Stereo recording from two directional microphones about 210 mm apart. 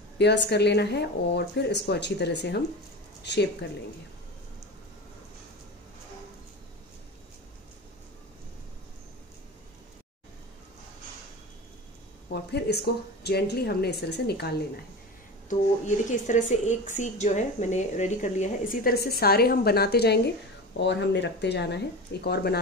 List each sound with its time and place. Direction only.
0.2 s speech: 55° left (ahead or behind)
12.3 s speech: 50° left (ahead or behind)
16.1 s a woman's voice: 35° left (ahead or behind)